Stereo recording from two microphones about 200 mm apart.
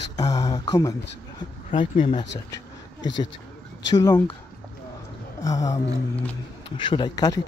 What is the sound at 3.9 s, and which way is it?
Speech, 20° left (ahead or behind).